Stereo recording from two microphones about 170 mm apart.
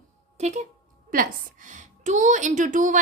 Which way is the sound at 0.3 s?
45° right (ahead or behind).